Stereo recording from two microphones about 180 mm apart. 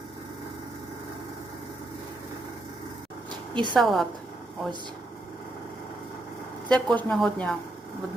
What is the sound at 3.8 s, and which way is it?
Speech, centre (ahead or behind).